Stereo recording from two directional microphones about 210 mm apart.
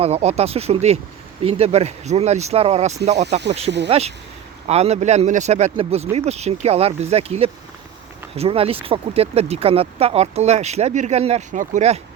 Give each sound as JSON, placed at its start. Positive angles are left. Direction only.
{"t": 0.0, "sound": "speech", "side_deg": -30}